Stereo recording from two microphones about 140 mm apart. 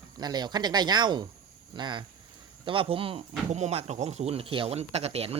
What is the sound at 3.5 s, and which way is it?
Speech, 50° right (ahead or behind).